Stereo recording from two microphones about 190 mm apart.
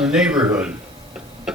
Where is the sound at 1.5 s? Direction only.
Centre (ahead or behind).